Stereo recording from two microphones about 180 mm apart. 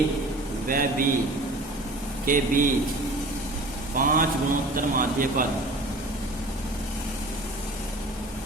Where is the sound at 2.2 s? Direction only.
50° right (ahead or behind).